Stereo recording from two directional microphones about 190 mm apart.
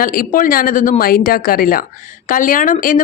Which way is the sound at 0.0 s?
50° left (ahead or behind).